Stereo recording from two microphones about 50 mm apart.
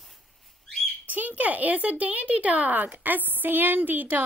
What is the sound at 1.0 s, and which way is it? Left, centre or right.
A woman's voice, right.